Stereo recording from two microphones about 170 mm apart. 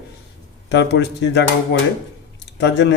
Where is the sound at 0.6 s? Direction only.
90° left.